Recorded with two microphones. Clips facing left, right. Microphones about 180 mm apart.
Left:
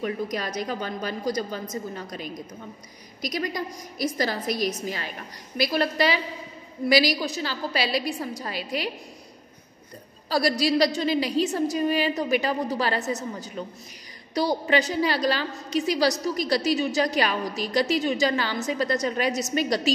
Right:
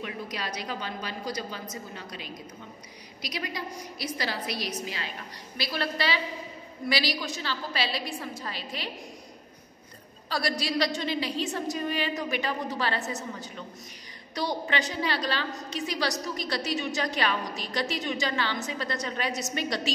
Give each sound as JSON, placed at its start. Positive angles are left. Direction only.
{"t": 0.0, "sound": "a woman's voice", "side_deg": 45}
{"t": 7.2, "sound": "a woman's voice", "side_deg": 35}
{"t": 8.5, "sound": "a woman's voice", "side_deg": 10}
{"t": 10.6, "sound": "a woman's voice", "side_deg": 35}
{"t": 14.3, "sound": "a woman's voice", "side_deg": 35}